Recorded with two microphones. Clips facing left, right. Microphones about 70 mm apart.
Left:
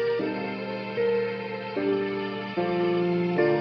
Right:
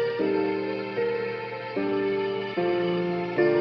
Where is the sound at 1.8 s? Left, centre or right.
Right.